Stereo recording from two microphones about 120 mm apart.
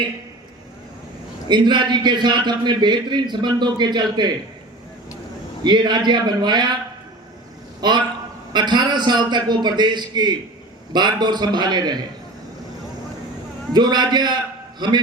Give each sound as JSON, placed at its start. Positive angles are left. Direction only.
{"t": 1.5, "sound": "a man's voice", "side_deg": -40}
{"t": 5.6, "sound": "a man's voice", "side_deg": -40}
{"t": 7.8, "sound": "a man's voice", "side_deg": -35}
{"t": 13.7, "sound": "a man's voice", "side_deg": -35}